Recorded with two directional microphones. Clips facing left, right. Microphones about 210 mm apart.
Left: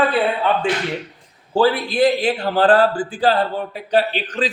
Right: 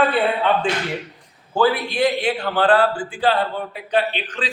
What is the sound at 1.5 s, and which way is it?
A man's voice, 30° left (ahead or behind).